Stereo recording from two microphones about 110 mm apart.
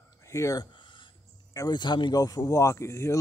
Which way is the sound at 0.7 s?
45° left (ahead or behind).